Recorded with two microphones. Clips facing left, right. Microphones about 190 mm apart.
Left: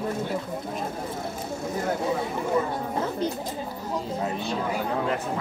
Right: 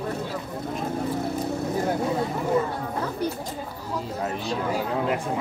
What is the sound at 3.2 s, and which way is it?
Chatter, 20° left (ahead or behind).